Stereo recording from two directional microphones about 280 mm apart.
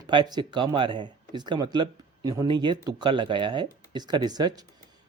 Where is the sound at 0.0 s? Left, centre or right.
Centre.